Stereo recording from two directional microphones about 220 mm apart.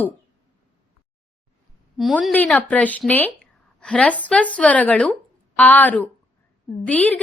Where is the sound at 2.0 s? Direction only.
Centre (ahead or behind).